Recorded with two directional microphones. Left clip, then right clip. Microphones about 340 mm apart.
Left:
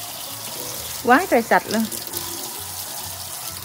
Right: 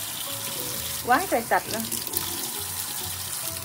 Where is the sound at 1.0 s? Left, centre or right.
Left.